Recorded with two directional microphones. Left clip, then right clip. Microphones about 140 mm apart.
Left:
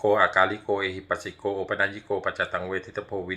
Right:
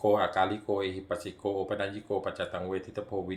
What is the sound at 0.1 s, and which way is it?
Speech, 35° right (ahead or behind).